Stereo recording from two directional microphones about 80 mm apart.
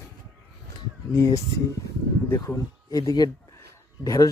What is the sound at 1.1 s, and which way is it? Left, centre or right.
Speech, left.